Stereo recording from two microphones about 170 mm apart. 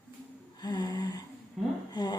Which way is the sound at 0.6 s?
25° left (ahead or behind).